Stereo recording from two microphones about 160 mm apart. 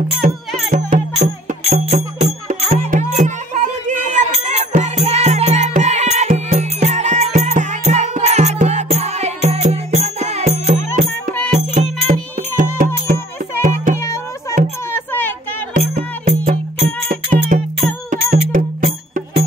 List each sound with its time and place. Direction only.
0.2 s music: 50° right (ahead or behind)
11.7 s music: 55° right (ahead or behind)
14.9 s music: 15° left (ahead or behind)
15.8 s music: 40° right (ahead or behind); by 18.9 s 60° right (ahead or behind)